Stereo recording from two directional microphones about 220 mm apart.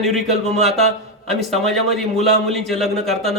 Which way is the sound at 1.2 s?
Centre (ahead or behind).